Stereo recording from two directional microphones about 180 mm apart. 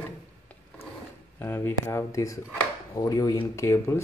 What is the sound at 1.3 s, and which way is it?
Speech, 15° left (ahead or behind).